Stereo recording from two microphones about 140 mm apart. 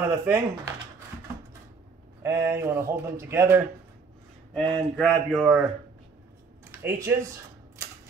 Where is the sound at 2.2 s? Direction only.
20° right (ahead or behind).